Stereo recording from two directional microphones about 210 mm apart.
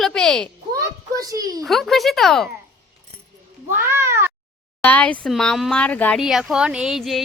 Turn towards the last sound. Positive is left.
turn(degrees=0)  # may be behind; listen again after turning